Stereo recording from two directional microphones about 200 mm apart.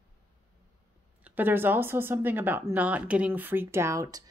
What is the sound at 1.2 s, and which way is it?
Speech, 10° right (ahead or behind).